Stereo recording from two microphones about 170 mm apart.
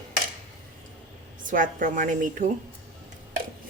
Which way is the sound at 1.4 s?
50° right (ahead or behind).